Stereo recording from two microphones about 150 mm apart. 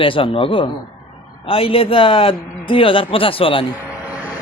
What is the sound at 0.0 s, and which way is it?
A man's voice, 35° left (ahead or behind).